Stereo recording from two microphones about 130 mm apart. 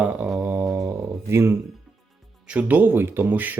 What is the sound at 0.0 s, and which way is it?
Mantra, 10° right (ahead or behind).